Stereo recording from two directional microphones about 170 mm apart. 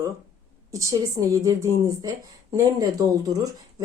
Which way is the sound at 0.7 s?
20° right (ahead or behind).